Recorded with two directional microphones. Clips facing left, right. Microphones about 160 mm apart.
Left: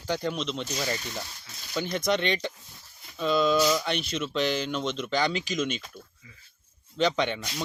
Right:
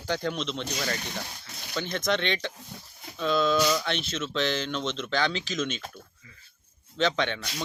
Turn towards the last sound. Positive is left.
turn(degrees=5)  # may be behind; listen again after turning